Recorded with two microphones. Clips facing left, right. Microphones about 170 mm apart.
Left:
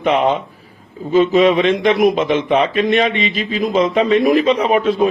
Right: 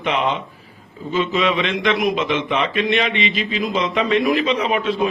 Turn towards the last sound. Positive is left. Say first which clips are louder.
# left 5 dB
turn(degrees=40)  # may be behind; listen again after turning